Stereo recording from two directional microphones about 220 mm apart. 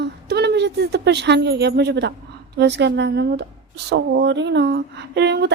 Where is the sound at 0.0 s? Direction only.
50° right (ahead or behind).